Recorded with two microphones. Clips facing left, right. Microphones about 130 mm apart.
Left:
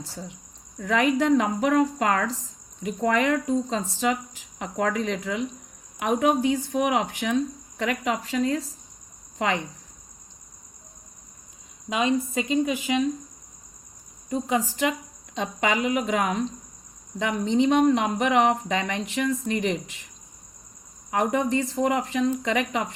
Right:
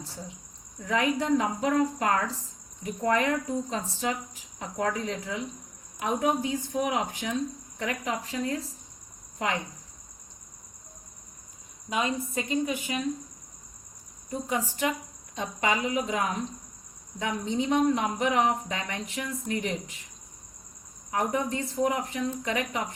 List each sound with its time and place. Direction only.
0.8 s a woman's voice: 80° left
7.8 s speech: 90° left
11.9 s speech: 90° left
14.3 s speech: 90° left
21.1 s speech: 90° left